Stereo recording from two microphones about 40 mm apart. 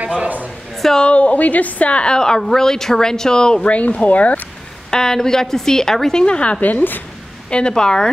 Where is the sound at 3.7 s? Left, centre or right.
Left.